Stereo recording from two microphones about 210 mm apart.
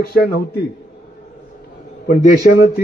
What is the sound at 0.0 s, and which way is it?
Speech, 45° left (ahead or behind).